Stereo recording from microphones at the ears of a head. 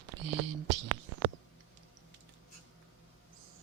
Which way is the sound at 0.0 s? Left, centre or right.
Right.